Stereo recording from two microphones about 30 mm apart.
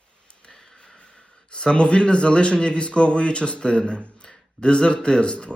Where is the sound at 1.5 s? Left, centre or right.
Left.